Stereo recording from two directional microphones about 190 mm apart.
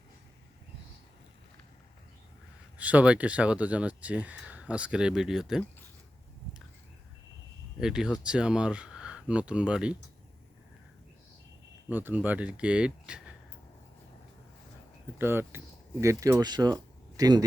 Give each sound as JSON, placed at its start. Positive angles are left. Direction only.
{"t": 2.7, "sound": "speech", "side_deg": -5}
{"t": 7.8, "sound": "speech", "side_deg": -5}
{"t": 11.9, "sound": "speech", "side_deg": -10}
{"t": 15.2, "sound": "speech", "side_deg": -10}